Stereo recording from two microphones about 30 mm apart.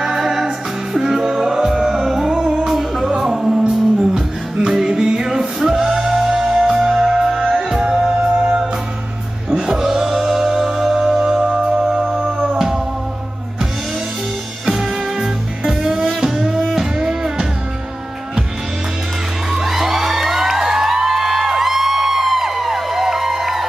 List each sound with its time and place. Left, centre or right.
0.0 s music: centre
14.7 s music: centre
19.5 s music: centre